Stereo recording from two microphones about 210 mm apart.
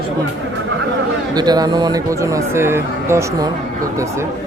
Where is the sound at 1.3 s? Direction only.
20° right (ahead or behind).